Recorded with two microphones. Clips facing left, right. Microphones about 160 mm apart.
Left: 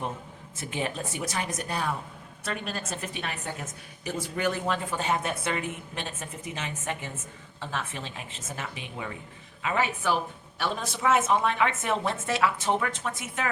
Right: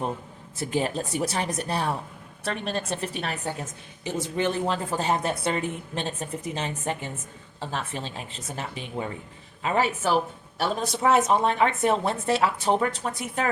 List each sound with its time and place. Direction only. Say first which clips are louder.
0.5 s a woman's voice: right 6 dB; 35° right (ahead or behind)